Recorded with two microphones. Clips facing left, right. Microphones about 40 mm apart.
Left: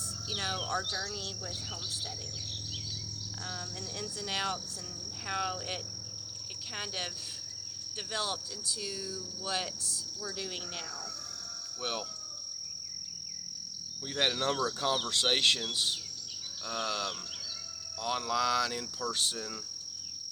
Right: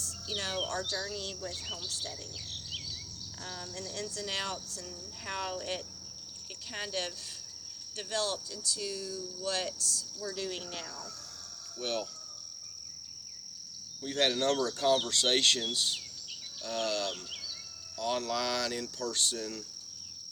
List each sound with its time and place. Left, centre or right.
0.3 s speech: centre
3.9 s speech: centre
8.1 s speech: centre
11.8 s speech: centre
14.1 s speech: centre
16.6 s speech: centre